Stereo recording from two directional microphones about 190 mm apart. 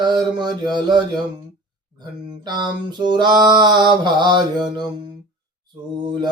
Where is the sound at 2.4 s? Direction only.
20° right (ahead or behind).